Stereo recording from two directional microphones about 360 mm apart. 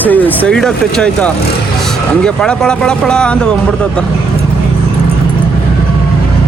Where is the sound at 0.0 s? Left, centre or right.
Centre.